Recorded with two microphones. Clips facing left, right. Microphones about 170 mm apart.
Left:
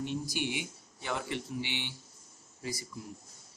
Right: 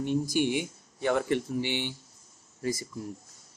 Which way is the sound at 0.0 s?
50° right (ahead or behind).